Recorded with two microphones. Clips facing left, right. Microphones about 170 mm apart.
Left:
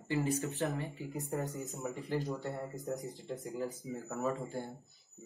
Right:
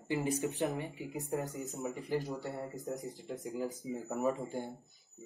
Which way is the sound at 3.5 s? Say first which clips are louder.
Right 2 dB; 15° right (ahead or behind).